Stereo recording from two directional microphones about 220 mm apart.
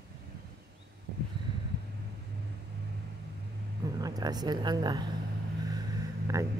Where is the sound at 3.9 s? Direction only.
15° right (ahead or behind).